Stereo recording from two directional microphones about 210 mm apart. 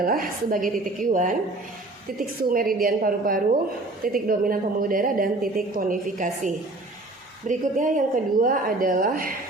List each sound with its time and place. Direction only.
0.0 s a woman's voice: 45° right (ahead or behind)